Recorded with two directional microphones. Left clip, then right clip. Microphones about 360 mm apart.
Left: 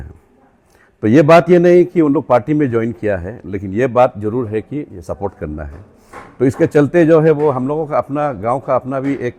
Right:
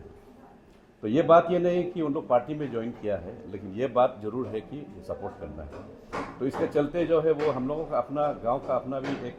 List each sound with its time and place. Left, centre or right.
1.0 s speech: left